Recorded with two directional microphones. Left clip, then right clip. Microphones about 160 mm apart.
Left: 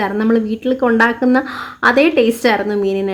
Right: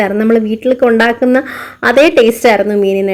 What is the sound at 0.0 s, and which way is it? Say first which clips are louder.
Speech: right 5 dB; 15° right (ahead or behind).